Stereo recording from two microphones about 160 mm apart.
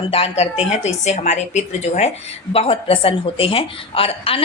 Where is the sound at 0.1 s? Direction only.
40° left (ahead or behind).